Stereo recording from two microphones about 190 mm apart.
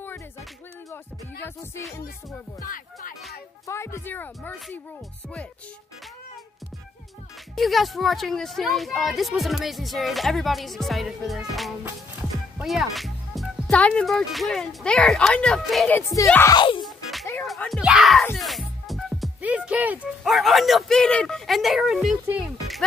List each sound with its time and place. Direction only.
1.4 s speech: 15° left (ahead or behind)
2.6 s speech: 45° left (ahead or behind)
3.6 s speech: 15° left (ahead or behind)
7.5 s a woman's voice: centre (ahead or behind)
16.3 s speech: 10° left (ahead or behind)
16.5 s music: 25° left (ahead or behind)
16.8 s music: centre (ahead or behind)
18.3 s speech: centre (ahead or behind)